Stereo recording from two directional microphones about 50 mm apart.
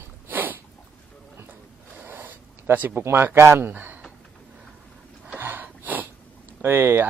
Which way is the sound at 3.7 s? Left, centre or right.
Right.